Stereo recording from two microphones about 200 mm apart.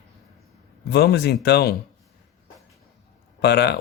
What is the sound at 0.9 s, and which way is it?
Speech, 55° left (ahead or behind).